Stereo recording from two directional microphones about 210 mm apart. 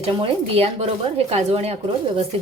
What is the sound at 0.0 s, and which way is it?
Speech, 25° right (ahead or behind).